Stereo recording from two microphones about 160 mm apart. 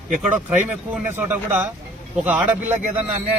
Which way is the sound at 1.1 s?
15° right (ahead or behind).